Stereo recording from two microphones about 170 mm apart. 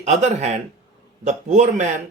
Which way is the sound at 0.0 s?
40° right (ahead or behind).